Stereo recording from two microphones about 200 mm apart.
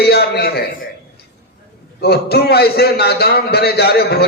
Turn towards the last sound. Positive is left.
turn(degrees=50)  # may be behind; listen again after turning